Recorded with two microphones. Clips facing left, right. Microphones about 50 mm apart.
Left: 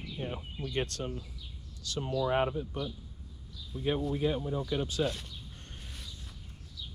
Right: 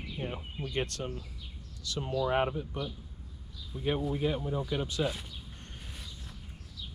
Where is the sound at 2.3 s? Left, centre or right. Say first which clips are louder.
Even; right.